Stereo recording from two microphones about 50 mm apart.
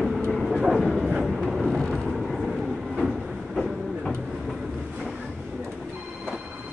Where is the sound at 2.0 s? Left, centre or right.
Centre.